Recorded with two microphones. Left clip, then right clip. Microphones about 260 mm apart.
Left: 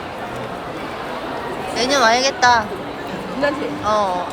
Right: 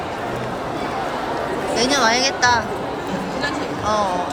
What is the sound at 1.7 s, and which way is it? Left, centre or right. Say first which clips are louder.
Speech: left 2 dB; centre.